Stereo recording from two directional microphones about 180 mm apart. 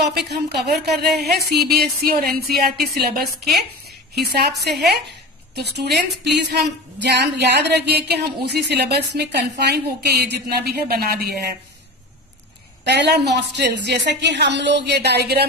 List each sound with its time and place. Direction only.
0.0 s a woman's voice: 65° right (ahead or behind)
12.8 s a woman's voice: 70° right (ahead or behind)